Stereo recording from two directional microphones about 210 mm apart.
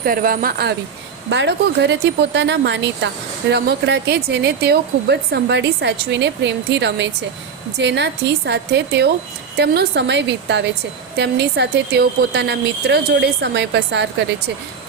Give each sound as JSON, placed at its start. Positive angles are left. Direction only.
{"t": 0.0, "sound": "speech", "side_deg": -40}